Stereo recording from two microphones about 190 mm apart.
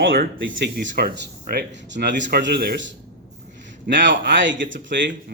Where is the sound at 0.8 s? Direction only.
50° right (ahead or behind).